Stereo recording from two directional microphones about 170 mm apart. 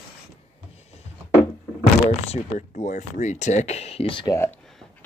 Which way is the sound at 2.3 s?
45° left (ahead or behind).